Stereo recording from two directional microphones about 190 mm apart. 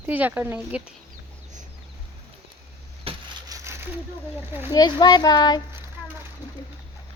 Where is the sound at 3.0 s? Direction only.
30° right (ahead or behind).